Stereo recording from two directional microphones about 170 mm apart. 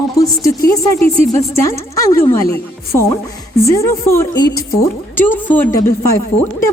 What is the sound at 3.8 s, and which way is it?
A woman's voice, 15° left (ahead or behind).